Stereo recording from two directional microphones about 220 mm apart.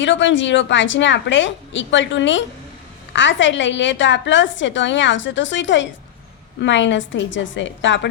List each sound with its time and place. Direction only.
0.0 s a woman's voice: 55° left (ahead or behind)